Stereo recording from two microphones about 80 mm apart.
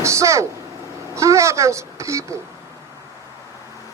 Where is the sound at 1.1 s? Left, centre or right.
Right.